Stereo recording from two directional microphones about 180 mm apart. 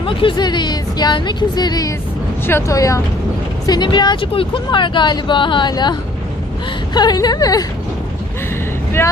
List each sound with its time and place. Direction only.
0.0 s speech: 30° left (ahead or behind)
9.0 s speech: 10° left (ahead or behind)